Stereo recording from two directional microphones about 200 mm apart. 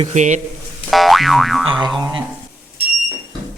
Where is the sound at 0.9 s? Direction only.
Centre (ahead or behind).